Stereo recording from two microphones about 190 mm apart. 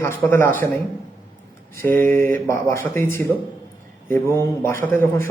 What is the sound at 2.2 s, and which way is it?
Speech, 15° left (ahead or behind).